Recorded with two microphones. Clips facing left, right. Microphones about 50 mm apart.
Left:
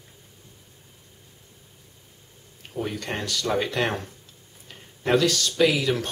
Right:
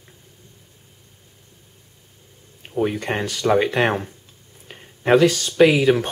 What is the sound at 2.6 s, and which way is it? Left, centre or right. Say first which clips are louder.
Speech: right 8 dB; right.